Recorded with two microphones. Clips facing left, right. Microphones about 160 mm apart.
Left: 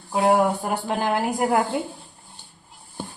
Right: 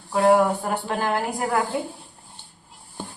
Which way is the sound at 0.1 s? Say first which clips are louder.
Right 1 dB; 15° left (ahead or behind).